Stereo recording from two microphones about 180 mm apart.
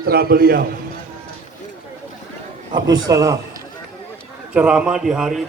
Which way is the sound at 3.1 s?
20° right (ahead or behind).